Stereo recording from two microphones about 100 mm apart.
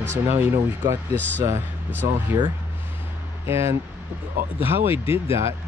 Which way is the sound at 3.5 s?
25° right (ahead or behind).